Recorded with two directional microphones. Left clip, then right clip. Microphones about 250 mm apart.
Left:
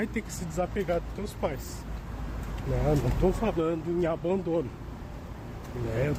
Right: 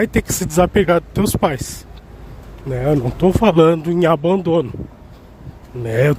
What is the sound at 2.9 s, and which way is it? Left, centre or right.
Speech, right.